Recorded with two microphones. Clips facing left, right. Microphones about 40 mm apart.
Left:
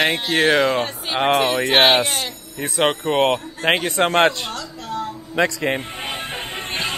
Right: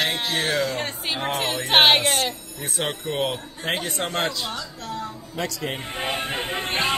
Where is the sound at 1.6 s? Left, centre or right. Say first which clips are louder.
Right 1 dB; centre.